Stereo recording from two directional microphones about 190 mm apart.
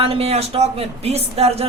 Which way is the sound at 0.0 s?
30° right (ahead or behind).